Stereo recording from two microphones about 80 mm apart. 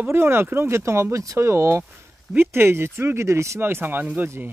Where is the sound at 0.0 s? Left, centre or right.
Right.